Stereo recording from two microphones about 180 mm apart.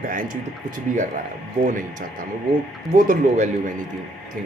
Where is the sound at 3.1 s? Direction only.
40° right (ahead or behind).